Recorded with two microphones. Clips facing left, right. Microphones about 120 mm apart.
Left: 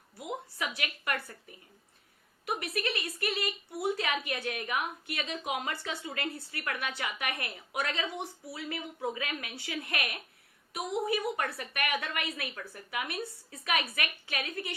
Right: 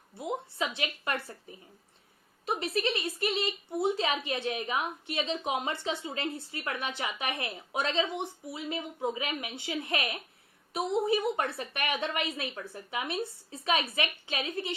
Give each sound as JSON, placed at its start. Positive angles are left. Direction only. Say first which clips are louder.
{"t": 0.2, "sound": "speech", "louder": "right 4 dB", "side_deg": -25}